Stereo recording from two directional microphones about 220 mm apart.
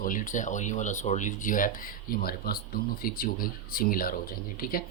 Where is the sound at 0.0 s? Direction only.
35° left (ahead or behind).